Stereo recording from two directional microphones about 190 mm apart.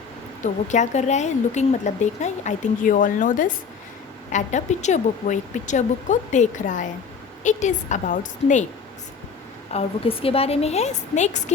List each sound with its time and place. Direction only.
0.4 s speech: 40° left (ahead or behind)
9.7 s speech: 30° left (ahead or behind)